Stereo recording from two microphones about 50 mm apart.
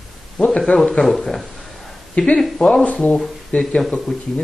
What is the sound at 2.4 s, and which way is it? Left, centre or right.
Speech, centre.